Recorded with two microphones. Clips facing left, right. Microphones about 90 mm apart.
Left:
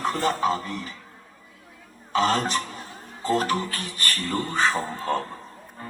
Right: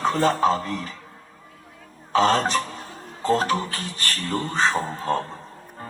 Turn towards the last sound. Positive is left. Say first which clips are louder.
# right 2 dB
turn(degrees=-20)  # may be behind; listen again after turning